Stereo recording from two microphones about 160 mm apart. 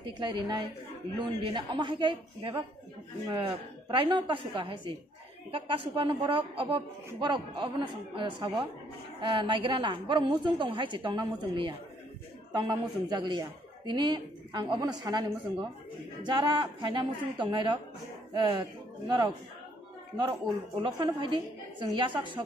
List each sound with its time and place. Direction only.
0.2 s a man's voice: 25° right (ahead or behind)
20.8 s a man's voice: 30° right (ahead or behind)